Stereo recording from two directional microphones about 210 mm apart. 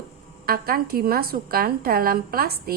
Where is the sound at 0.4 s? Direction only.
45° right (ahead or behind).